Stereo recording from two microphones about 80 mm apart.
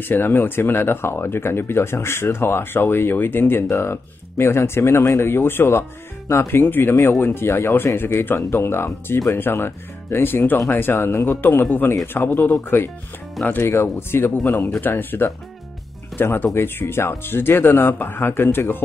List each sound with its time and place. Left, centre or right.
0.0 s speech: left